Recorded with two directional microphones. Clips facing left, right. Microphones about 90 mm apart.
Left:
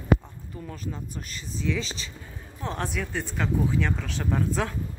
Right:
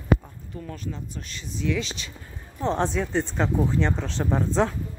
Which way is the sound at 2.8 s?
25° right (ahead or behind).